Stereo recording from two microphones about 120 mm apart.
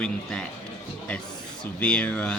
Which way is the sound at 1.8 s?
10° left (ahead or behind).